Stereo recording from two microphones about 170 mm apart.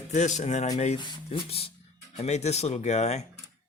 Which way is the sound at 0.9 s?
25° left (ahead or behind).